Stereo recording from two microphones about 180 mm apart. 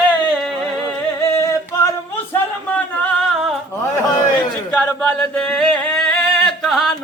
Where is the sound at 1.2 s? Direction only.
15° left (ahead or behind).